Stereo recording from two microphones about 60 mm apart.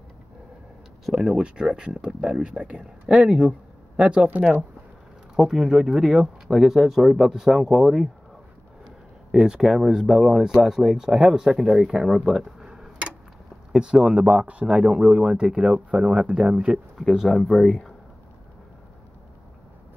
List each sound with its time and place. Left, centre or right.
1.0 s speech: centre
1.3 s speech: centre
5.3 s speech: centre
9.3 s speech: centre
16.9 s speech: centre